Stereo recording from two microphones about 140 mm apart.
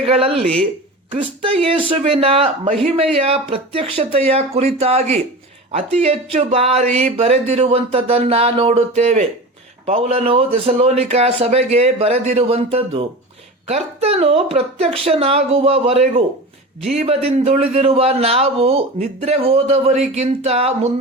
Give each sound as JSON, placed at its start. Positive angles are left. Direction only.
{"t": 0.0, "sound": "speech", "side_deg": -45}
{"t": 0.3, "sound": "speech", "side_deg": 5}
{"t": 1.2, "sound": "speech", "side_deg": -40}